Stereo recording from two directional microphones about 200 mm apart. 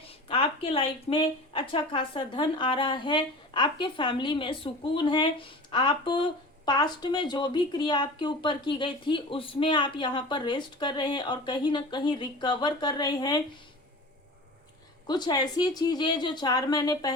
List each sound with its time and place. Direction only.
0.0 s speech: 30° left (ahead or behind)
15.0 s speech: 20° left (ahead or behind)